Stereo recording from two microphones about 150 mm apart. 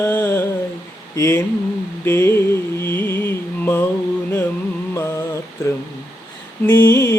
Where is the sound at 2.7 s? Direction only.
15° left (ahead or behind).